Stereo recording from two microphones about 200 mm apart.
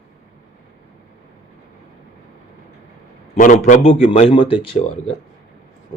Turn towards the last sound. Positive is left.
turn(degrees=25)  # may be behind; listen again after turning